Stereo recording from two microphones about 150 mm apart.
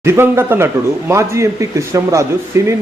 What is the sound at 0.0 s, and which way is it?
A man's voice, 15° right (ahead or behind).